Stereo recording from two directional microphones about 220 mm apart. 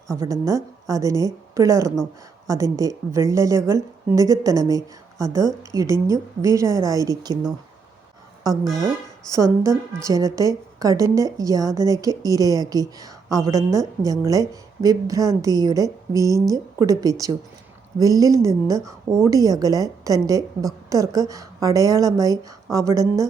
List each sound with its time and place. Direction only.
0.1 s a woman's voice: 15° right (ahead or behind)
8.6 s speech: centre (ahead or behind)
9.3 s a woman's voice: 15° right (ahead or behind)